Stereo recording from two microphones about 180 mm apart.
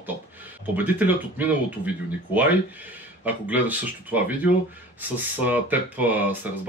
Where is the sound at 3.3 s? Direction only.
10° right (ahead or behind).